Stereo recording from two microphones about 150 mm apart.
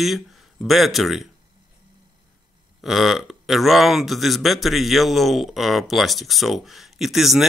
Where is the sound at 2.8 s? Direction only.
Centre (ahead or behind).